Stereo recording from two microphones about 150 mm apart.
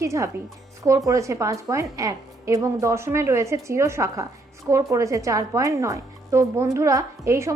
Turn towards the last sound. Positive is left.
turn(degrees=-20)  # may be behind; listen again after turning